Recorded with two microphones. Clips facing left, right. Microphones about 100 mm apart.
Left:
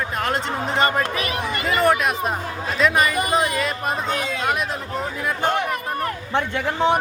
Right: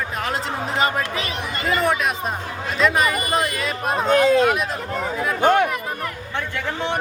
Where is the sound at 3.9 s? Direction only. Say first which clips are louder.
Right 9 dB; 50° right (ahead or behind).